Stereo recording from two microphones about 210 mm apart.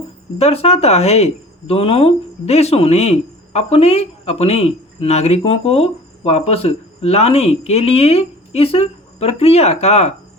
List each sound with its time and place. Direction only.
0.3 s speech: 30° left (ahead or behind)